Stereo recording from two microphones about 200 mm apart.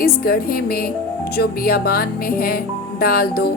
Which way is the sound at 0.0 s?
50° left (ahead or behind).